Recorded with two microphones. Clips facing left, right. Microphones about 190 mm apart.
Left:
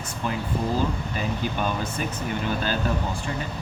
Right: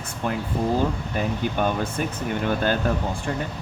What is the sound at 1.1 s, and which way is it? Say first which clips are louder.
Speech: right 3 dB; 55° right (ahead or behind).